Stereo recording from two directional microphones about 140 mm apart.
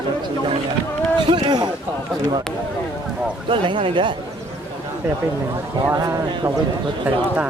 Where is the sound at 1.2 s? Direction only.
35° right (ahead or behind).